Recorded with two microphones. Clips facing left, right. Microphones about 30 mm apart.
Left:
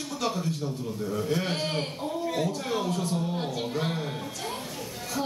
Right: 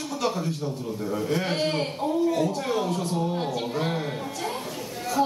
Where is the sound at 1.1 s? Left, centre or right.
Centre.